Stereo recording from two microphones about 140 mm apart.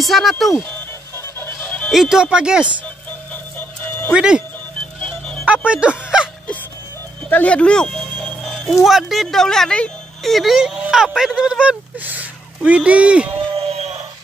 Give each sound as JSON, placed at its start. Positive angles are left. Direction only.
{"t": 0.0, "sound": "speech", "side_deg": 0}
{"t": 1.1, "sound": "music", "side_deg": 15}
{"t": 2.0, "sound": "speech", "side_deg": -5}
{"t": 4.1, "sound": "speech", "side_deg": -5}
{"t": 5.0, "sound": "music", "side_deg": 5}
{"t": 5.7, "sound": "music", "side_deg": -10}
{"t": 7.2, "sound": "speech", "side_deg": 10}
{"t": 13.3, "sound": "a sound", "side_deg": -45}